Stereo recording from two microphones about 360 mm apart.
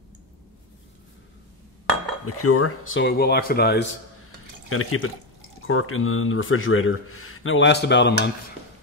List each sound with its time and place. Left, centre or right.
2.2 s speech: left